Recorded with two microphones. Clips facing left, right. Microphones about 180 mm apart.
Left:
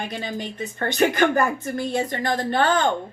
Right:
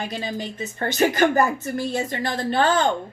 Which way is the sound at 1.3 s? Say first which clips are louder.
Right 1 dB; 50° left (ahead or behind).